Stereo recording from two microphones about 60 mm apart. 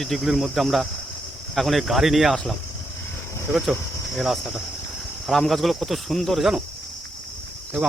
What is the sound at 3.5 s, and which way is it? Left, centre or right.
Speech, centre.